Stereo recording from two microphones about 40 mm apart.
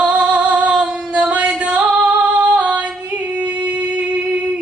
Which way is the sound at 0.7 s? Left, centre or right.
Right.